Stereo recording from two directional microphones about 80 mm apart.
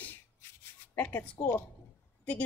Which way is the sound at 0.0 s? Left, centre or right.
Left.